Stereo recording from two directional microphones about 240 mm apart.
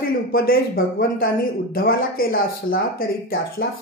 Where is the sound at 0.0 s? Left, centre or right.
Left.